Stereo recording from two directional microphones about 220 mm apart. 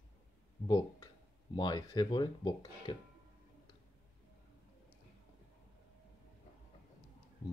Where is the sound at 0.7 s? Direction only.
20° left (ahead or behind).